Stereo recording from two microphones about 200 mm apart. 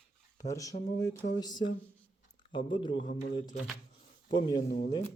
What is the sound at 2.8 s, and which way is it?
Speech, 25° left (ahead or behind).